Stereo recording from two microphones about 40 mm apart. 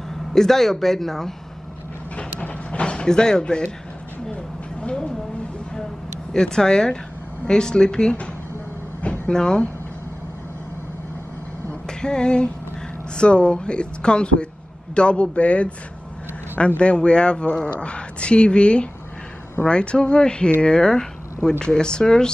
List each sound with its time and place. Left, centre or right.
0.3 s speech: centre
2.4 s sliding door: left
6.3 s speech: centre
9.3 s speech: centre
12.0 s a man's voice: left